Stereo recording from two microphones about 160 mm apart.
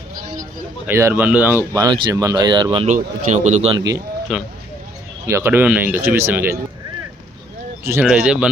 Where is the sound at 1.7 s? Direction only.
20° right (ahead or behind).